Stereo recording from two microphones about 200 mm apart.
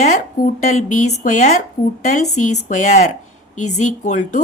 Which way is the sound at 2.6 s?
35° left (ahead or behind).